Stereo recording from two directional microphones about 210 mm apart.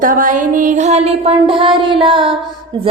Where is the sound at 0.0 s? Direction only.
35° right (ahead or behind).